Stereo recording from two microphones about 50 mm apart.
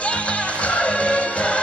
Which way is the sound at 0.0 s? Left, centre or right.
Left.